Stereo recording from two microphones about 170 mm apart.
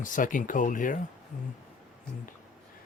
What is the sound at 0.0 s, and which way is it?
Speech, 50° left (ahead or behind).